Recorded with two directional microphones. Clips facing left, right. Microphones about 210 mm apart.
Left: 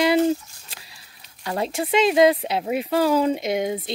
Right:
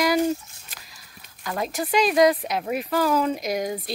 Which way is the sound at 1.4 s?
30° left (ahead or behind).